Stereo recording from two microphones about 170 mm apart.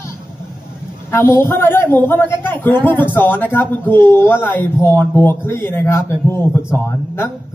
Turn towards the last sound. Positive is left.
turn(degrees=15)  # may be behind; listen again after turning